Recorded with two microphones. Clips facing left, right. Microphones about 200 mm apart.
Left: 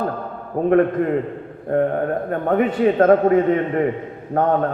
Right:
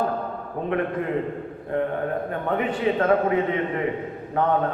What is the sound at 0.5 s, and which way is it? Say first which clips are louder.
A man's voice: left 9 dB; 45° left (ahead or behind).